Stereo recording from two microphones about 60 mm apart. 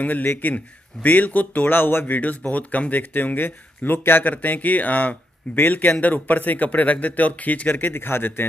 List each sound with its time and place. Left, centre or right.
0.0 s a man's voice: left
7.9 s a man's voice: left